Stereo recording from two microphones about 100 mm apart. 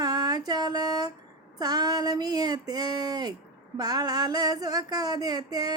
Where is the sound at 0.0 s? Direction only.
40° right (ahead or behind).